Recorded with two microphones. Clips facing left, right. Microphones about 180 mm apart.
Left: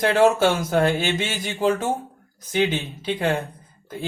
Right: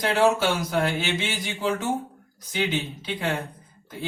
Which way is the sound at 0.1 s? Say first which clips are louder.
Left 2 dB; 50° left (ahead or behind).